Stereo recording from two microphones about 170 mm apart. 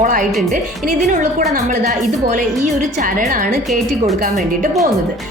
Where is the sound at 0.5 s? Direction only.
45° right (ahead or behind).